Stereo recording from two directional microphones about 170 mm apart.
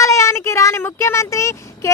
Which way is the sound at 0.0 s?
20° left (ahead or behind).